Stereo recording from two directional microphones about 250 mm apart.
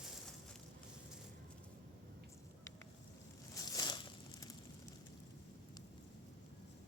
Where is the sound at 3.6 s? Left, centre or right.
Centre.